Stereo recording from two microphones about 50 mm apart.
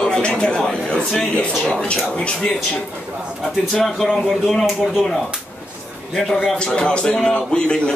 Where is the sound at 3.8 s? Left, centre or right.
Centre.